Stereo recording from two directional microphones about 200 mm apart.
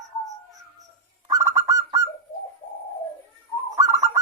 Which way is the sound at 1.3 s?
15° right (ahead or behind).